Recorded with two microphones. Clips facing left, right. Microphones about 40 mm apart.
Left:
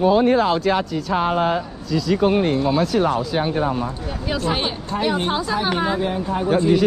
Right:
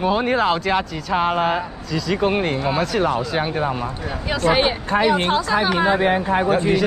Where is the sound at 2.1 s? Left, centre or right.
Centre.